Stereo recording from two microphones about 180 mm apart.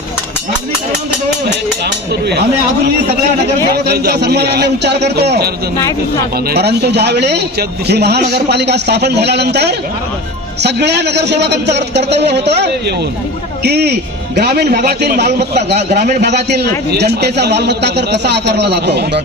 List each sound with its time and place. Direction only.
3.4 s a man's voice: 60° right (ahead or behind)
6.5 s a man's voice: 65° right (ahead or behind)